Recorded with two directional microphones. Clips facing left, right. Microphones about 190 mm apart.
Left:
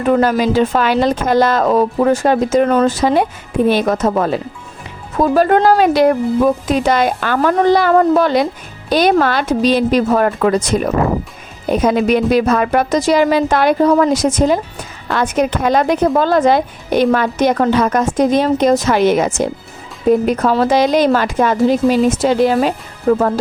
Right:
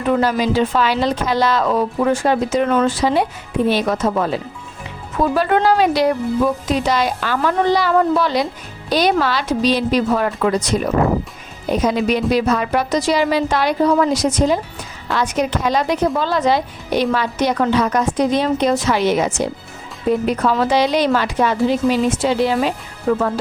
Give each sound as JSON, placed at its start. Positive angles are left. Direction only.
{"t": 0.0, "sound": "speech", "side_deg": 50}